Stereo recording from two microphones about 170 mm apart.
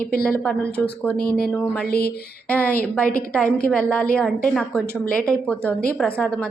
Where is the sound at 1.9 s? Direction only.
65° left (ahead or behind).